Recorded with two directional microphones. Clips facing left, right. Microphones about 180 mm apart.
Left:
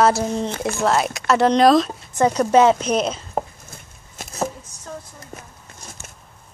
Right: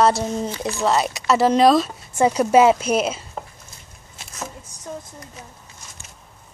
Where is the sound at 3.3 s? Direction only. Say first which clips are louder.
Left 8 dB; 45° left (ahead or behind).